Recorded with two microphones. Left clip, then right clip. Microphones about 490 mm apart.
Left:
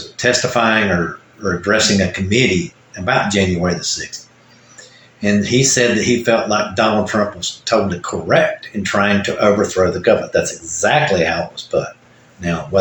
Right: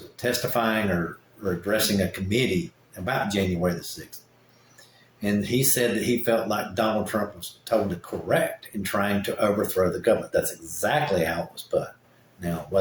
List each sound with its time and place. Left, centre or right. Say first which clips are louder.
0.2 s speech: left 10 dB; right
5.2 s speech: left 10 dB; right